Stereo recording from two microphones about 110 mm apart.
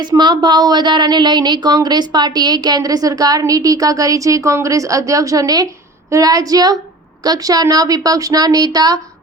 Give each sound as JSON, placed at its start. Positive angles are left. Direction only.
{"t": 0.2, "sound": "a woman's voice", "side_deg": -40}